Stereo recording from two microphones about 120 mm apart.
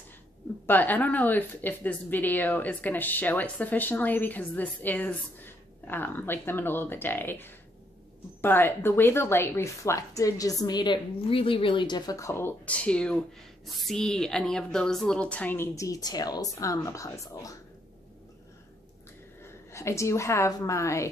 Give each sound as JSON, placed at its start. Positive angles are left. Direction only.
{"t": 0.7, "sound": "a woman's voice", "side_deg": 15}
{"t": 11.1, "sound": "speech", "side_deg": 50}
{"t": 15.8, "sound": "speech", "side_deg": 30}
{"t": 19.4, "sound": "a woman's voice", "side_deg": 25}